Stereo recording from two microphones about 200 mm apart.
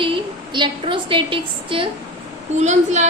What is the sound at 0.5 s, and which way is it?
A woman's voice, 25° right (ahead or behind).